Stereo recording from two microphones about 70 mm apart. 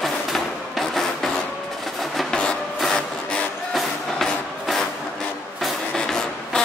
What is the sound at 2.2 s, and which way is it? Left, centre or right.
Printer, centre.